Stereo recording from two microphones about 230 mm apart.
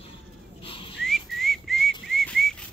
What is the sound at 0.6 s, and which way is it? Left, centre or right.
Whistling, left.